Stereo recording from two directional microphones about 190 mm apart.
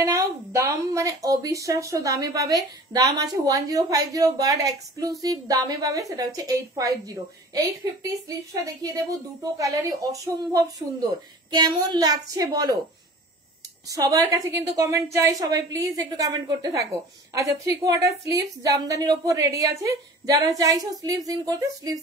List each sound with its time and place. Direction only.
0.0 s a woman's voice: 15° right (ahead or behind)
13.8 s a woman's voice: 20° right (ahead or behind)